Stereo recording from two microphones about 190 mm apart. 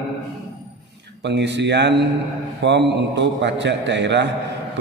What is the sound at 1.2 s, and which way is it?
Speech, 65° right (ahead or behind).